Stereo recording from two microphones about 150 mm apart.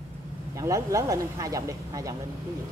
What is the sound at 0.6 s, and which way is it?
Speech, 20° right (ahead or behind).